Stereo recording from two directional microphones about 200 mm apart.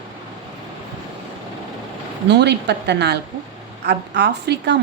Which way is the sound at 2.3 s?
60° right (ahead or behind).